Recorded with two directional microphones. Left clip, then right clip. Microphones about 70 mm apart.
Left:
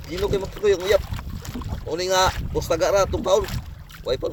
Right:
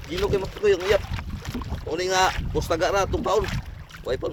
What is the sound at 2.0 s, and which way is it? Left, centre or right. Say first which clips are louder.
Speech: left 2 dB; right.